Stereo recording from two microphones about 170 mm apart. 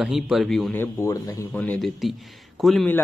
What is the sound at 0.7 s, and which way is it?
Speech, 15° left (ahead or behind).